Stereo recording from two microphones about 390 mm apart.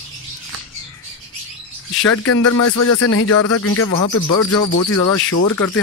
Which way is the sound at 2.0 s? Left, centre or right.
Left.